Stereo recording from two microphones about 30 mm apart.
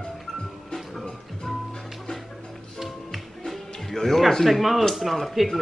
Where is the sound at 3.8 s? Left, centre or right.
Centre.